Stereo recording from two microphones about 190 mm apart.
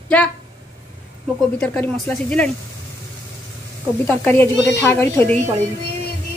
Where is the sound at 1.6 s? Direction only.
10° left (ahead or behind).